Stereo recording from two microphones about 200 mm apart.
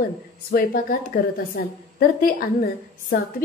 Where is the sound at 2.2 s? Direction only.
45° left (ahead or behind).